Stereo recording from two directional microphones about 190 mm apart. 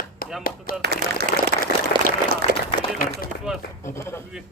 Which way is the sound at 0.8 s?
60° right (ahead or behind).